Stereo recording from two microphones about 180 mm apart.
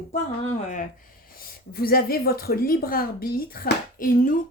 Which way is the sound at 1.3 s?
55° left (ahead or behind).